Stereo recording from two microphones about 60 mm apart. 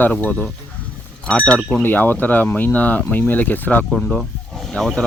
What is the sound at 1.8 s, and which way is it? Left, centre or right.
Speech, left.